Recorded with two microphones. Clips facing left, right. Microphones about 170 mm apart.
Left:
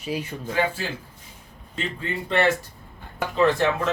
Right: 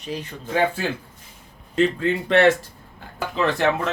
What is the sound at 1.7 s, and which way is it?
Speech, 80° right.